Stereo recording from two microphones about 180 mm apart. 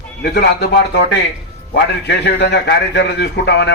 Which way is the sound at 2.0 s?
75° left (ahead or behind).